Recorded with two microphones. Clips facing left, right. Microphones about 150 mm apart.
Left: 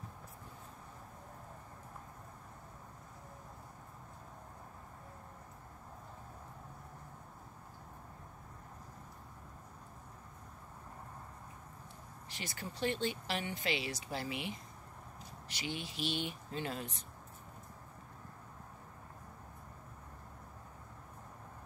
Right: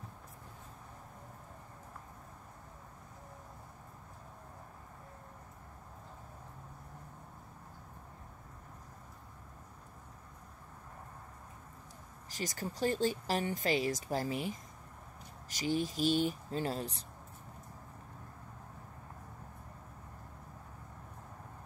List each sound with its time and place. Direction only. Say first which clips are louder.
12.3 s speech: right 6 dB; 40° right (ahead or behind)